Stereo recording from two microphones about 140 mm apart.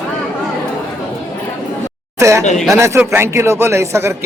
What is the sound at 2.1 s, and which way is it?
Speech, 20° right (ahead or behind).